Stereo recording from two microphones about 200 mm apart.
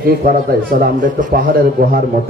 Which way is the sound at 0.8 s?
45° right (ahead or behind).